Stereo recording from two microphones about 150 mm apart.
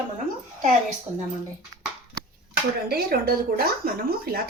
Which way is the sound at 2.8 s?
90° right.